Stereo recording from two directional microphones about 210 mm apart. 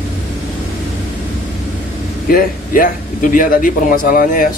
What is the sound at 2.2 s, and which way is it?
Speech, 45° left (ahead or behind).